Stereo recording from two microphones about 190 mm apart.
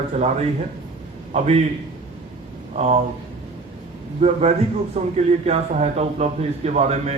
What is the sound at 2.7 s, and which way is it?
Speech, 35° right (ahead or behind).